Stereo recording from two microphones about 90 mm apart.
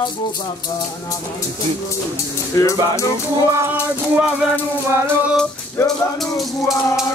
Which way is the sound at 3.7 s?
10° right (ahead or behind).